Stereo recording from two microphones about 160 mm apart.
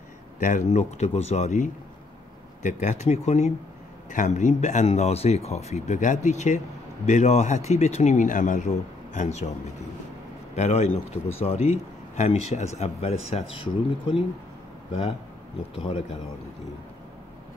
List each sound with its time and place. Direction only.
0.4 s speech: 55° left (ahead or behind)
10.5 s a man's voice: 45° left (ahead or behind)
15.7 s speech: 35° left (ahead or behind)